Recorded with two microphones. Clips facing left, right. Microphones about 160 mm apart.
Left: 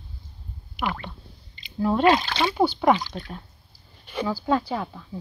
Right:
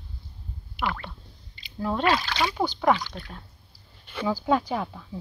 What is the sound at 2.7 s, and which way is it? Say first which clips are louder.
Speech: left 1 dB; 10° left (ahead or behind).